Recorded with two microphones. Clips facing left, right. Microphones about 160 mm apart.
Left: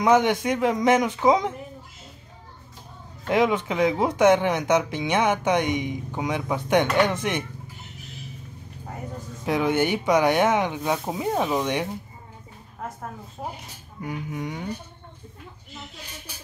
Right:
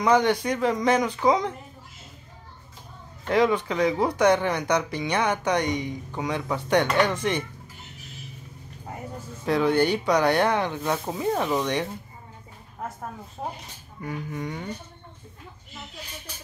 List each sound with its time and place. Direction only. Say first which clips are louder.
0.1 s speech: left 1 dB; 20° left (ahead or behind)
3.3 s speech: even; 15° left (ahead or behind)
9.5 s speech: right 1 dB; 15° left (ahead or behind)
14.0 s speech: left 1 dB; 5° left (ahead or behind)